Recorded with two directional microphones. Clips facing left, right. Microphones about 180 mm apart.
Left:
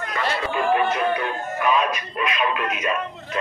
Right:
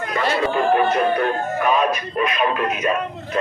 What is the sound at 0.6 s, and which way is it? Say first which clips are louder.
Speech: right 2 dB; 40° right (ahead or behind).